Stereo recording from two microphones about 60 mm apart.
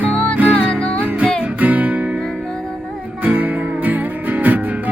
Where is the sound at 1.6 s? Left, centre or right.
Right.